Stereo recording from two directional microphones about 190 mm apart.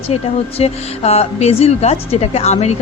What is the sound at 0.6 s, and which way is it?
Speech, 35° left (ahead or behind).